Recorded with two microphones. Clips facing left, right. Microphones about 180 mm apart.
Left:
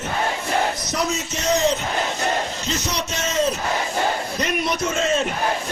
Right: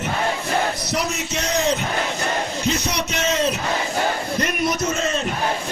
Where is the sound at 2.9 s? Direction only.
65° right (ahead or behind).